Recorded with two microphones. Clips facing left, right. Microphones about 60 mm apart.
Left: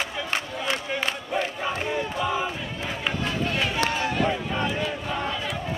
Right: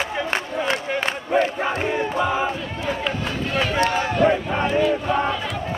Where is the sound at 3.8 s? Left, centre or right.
Right.